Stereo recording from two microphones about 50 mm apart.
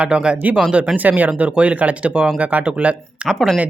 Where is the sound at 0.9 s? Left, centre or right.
Right.